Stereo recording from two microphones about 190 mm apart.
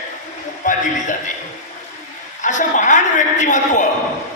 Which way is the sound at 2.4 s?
40° left (ahead or behind).